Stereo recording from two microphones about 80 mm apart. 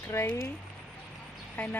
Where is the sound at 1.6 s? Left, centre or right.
Left.